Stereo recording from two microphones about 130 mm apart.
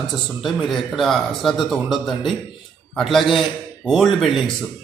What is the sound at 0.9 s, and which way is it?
A man's voice, centre (ahead or behind).